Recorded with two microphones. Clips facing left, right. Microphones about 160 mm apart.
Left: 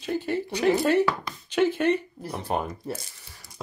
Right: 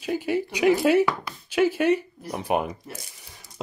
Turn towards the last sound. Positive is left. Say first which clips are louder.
# right 2 dB
turn(degrees=-20)  # may be behind; listen again after turning